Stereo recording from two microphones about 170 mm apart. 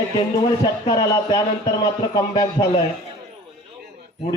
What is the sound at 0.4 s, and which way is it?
A man's voice, 25° left (ahead or behind).